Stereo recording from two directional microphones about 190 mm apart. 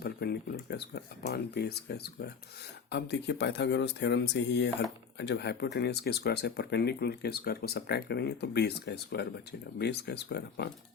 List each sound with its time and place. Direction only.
0.0 s speech: 55° left (ahead or behind)